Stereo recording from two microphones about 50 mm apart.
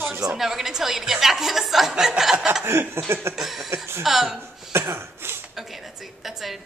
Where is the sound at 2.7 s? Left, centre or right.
Right.